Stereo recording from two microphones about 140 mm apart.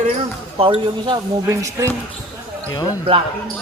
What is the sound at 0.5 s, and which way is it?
Speech, 40° right (ahead or behind).